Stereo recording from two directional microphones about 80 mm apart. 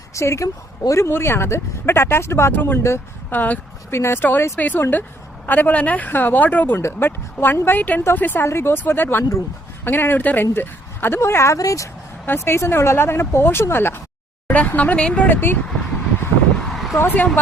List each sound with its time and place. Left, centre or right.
0.1 s a woman's voice: left
1.0 s speech: left
6.7 s speech: left
12.2 s speech: left
16.6 s a sound: centre
17.0 s speech: left